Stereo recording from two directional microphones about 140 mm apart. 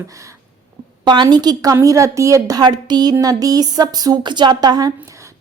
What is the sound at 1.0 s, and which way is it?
A woman's voice, 30° right (ahead or behind).